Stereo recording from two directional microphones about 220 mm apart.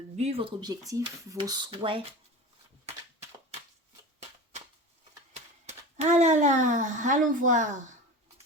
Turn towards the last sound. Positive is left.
turn(degrees=-35)  # may be behind; listen again after turning